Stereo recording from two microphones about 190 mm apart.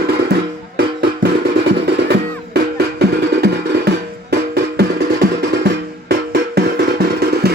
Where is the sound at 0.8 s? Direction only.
55° right (ahead or behind).